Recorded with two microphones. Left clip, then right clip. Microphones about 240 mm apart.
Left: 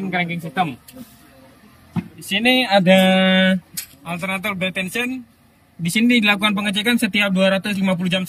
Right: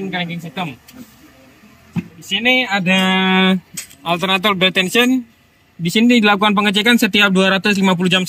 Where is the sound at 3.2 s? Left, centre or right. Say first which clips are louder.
Right 1 dB; centre.